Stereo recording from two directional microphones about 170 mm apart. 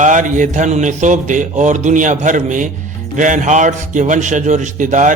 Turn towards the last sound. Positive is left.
turn(degrees=-45)  # may be behind; listen again after turning